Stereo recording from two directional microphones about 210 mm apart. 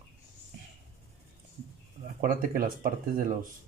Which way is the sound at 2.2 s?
45° right (ahead or behind).